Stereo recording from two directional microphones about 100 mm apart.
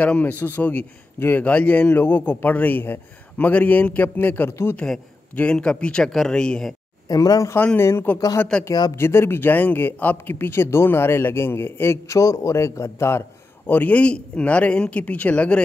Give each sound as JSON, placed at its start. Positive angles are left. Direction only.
{"t": 0.0, "sound": "a man's voice", "side_deg": 15}
{"t": 4.7, "sound": "a man's voice", "side_deg": 5}
{"t": 7.1, "sound": "speech", "side_deg": 35}
{"t": 7.5, "sound": "speech", "side_deg": 20}
{"t": 8.5, "sound": "a man's voice", "side_deg": 10}
{"t": 8.9, "sound": "a man's voice", "side_deg": 25}